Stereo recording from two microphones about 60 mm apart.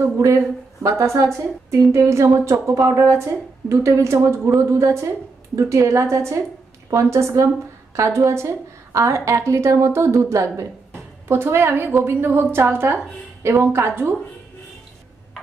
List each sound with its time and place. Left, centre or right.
0.8 s a woman's voice: right
10.9 s a sound: right
12.0 s a woman's voice: right